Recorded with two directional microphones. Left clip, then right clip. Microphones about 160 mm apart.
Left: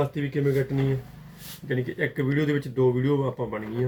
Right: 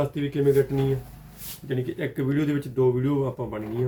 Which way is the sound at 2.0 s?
10° right (ahead or behind).